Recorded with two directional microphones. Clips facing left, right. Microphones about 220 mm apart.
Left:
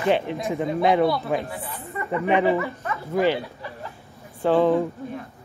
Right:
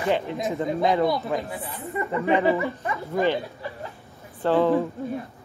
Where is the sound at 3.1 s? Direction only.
10° left (ahead or behind).